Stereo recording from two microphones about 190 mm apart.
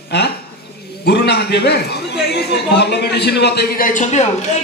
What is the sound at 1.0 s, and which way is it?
A man's voice, 60° left (ahead or behind).